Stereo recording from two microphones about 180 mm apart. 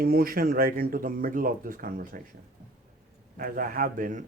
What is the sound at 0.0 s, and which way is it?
Speech, 55° right (ahead or behind).